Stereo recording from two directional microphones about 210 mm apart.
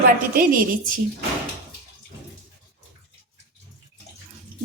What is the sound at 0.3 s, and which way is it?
Speech, 40° right (ahead or behind).